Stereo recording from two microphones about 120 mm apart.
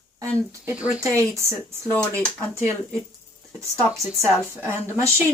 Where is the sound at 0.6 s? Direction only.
10° right (ahead or behind).